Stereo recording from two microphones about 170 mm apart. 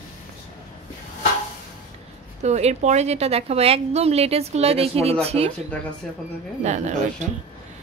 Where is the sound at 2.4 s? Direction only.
40° right (ahead or behind).